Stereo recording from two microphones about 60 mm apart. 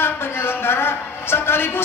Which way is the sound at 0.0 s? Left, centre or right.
Left.